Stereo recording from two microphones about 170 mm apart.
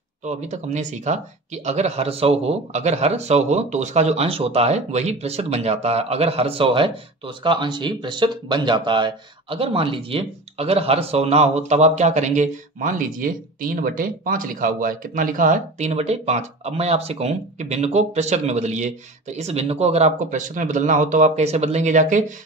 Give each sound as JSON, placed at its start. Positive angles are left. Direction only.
{"t": 0.2, "sound": "speech", "side_deg": -40}